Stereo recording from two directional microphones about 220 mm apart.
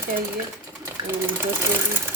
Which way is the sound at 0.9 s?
10° right (ahead or behind).